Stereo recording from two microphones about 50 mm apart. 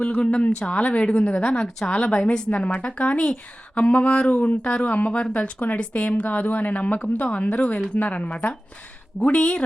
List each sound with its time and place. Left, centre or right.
0.2 s speech: left
1.5 s speech: centre
1.9 s speech: left